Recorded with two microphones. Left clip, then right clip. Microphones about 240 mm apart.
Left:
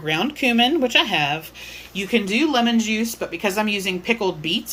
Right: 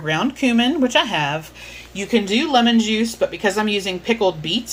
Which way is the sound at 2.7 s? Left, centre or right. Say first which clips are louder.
Right 4 dB; centre.